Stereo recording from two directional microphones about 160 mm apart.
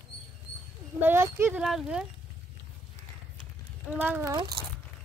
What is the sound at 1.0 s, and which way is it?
Speech, 15° right (ahead or behind).